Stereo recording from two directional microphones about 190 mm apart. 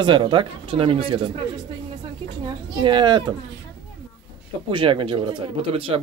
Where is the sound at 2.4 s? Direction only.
25° right (ahead or behind).